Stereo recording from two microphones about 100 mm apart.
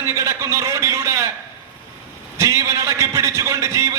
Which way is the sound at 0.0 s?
30° right (ahead or behind).